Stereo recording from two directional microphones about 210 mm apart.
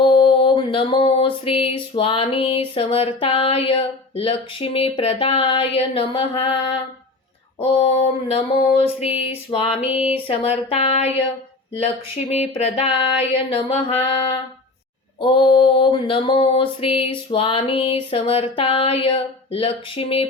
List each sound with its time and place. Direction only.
0.0 s a sound: 25° left (ahead or behind)
2.0 s speech: 25° left (ahead or behind)
8.3 s speech: 30° left (ahead or behind)
12.3 s speech: 30° left (ahead or behind)